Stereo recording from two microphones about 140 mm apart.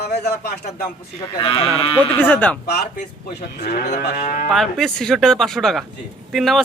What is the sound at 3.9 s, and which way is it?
Moo, 70° left (ahead or behind).